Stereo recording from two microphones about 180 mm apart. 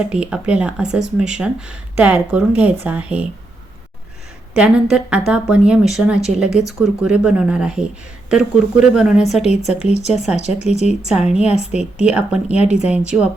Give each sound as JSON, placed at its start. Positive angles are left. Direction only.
{"t": 0.0, "sound": "speech", "side_deg": -5}
{"t": 4.5, "sound": "a woman's voice", "side_deg": -5}
{"t": 9.5, "sound": "speech", "side_deg": 35}
{"t": 11.1, "sound": "a woman's voice", "side_deg": -5}
{"t": 11.4, "sound": "speech", "side_deg": 35}
{"t": 12.0, "sound": "speech", "side_deg": -5}